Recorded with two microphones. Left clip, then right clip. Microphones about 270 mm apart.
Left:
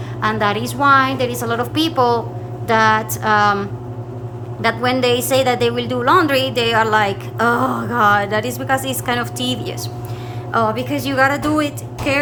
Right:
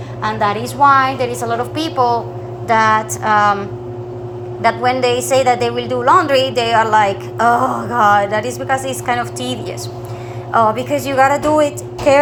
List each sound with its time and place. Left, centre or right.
0.2 s a woman's voice: centre
9.0 s a woman's voice: centre